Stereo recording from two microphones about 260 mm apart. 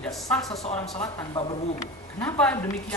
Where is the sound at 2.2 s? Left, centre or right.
Centre.